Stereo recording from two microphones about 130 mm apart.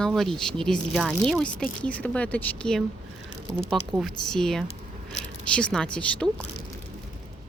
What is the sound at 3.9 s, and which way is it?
A woman's voice, 5° left (ahead or behind).